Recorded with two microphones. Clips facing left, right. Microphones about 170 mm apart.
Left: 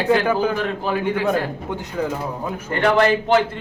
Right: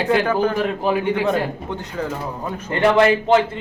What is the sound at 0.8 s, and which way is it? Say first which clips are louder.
Speech: right 3 dB; 20° right (ahead or behind).